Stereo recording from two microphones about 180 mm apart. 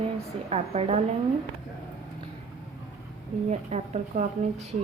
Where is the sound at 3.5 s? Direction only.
40° right (ahead or behind).